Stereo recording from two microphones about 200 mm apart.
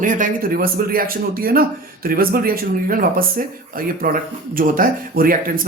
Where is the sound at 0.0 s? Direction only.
40° right (ahead or behind).